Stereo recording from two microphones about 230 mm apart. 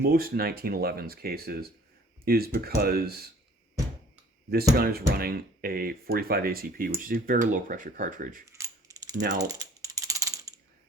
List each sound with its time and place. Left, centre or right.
0.0 s speech: right
4.5 s speech: right
8.4 s mechanisms: centre
9.4 s typing: centre